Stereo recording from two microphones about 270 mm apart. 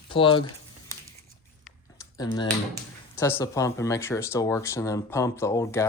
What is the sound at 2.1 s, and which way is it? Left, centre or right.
Speech, centre.